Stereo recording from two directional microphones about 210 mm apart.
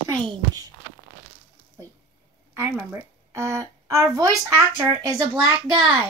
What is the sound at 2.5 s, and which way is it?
A woman's voice, 10° right (ahead or behind).